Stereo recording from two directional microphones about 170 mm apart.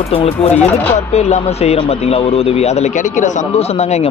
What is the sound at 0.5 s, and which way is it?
Speech, 10° left (ahead or behind).